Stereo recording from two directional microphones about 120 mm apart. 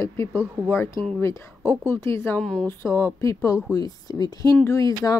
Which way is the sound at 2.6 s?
20° left (ahead or behind).